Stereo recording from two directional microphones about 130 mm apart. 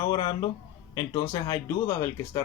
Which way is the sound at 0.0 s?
30° left (ahead or behind).